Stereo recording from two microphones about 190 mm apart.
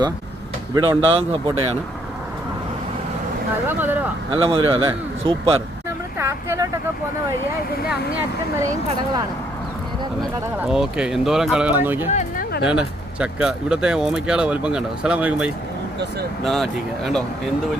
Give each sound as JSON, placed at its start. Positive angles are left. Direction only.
{"t": 0.7, "sound": "a man's voice", "side_deg": -25}
{"t": 3.7, "sound": "speech", "side_deg": -10}
{"t": 4.3, "sound": "a man's voice", "side_deg": -30}
{"t": 6.1, "sound": "speech", "side_deg": -15}
{"t": 10.6, "sound": "speech", "side_deg": -5}